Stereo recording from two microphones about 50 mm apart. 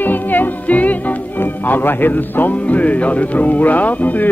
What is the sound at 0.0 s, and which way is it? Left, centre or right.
Music, left.